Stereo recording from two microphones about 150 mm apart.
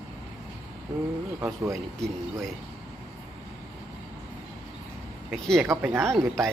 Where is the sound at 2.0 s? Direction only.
5° left (ahead or behind).